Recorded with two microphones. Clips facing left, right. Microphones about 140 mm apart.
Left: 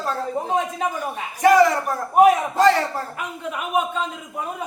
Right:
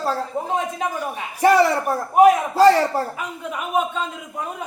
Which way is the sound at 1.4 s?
30° right (ahead or behind).